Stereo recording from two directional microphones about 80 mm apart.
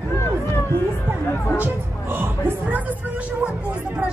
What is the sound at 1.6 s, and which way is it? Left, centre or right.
Music, right.